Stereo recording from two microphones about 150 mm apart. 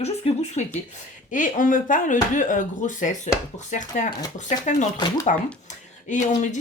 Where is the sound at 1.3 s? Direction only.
60° left (ahead or behind).